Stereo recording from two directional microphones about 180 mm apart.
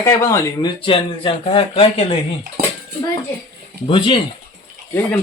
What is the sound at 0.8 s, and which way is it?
Speech, 30° left (ahead or behind).